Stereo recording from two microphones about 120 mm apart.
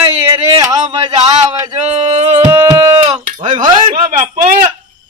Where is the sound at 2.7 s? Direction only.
30° right (ahead or behind).